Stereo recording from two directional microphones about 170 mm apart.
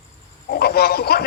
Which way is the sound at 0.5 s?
65° left (ahead or behind).